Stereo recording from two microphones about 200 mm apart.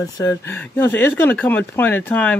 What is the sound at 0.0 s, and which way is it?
Speech, 15° left (ahead or behind).